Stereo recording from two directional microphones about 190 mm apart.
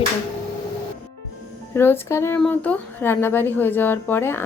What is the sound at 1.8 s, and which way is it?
Speech, 10° left (ahead or behind).